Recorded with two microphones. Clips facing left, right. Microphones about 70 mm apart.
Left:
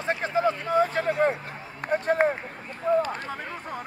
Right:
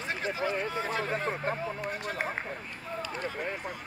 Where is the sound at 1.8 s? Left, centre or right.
Left.